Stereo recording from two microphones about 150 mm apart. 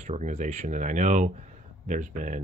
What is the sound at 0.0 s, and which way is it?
Speech, 50° right (ahead or behind).